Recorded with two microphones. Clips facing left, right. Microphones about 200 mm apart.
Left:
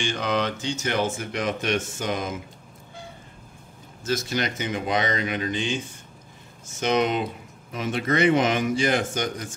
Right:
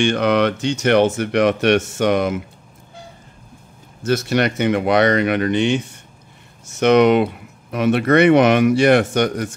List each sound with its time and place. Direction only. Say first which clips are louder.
0.0 s speech: right 9 dB; 65° right (ahead or behind)
4.0 s speech: right 8 dB; 65° right (ahead or behind)